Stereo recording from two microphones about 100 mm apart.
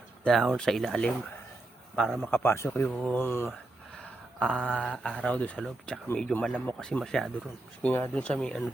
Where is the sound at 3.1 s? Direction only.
25° left (ahead or behind).